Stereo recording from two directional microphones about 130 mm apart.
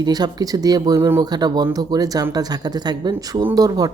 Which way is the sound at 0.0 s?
30° right (ahead or behind).